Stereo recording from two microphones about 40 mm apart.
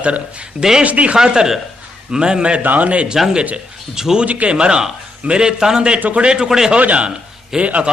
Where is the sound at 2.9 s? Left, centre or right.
Right.